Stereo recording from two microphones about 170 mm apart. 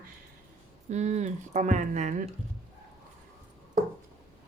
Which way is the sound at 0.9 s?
40° right (ahead or behind).